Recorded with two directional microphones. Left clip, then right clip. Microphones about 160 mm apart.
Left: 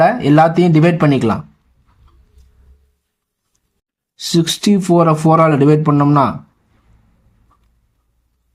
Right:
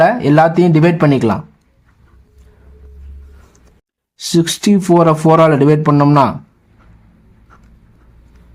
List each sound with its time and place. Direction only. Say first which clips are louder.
0.0 s speech: right 1 dB; 10° right (ahead or behind)
4.2 s speech: right 1 dB; 15° right (ahead or behind)